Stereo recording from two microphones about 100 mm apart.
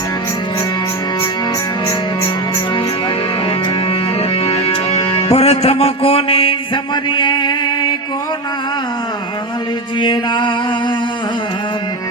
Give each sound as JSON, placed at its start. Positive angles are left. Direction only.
{"t": 4.2, "sound": "music", "side_deg": 85}
{"t": 6.9, "sound": "a sound", "side_deg": 50}
{"t": 10.0, "sound": "music", "side_deg": 50}